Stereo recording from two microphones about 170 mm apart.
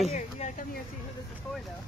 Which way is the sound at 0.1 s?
45° left (ahead or behind).